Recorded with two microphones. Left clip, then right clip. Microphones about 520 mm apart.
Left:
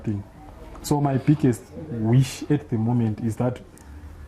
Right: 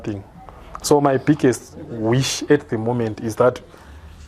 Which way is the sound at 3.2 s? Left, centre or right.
Right.